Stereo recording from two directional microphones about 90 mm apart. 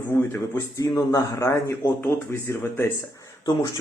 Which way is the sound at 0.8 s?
40° left (ahead or behind).